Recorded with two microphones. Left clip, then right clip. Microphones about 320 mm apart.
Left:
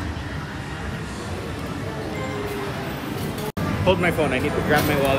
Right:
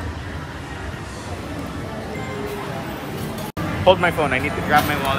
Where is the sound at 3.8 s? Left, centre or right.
Centre.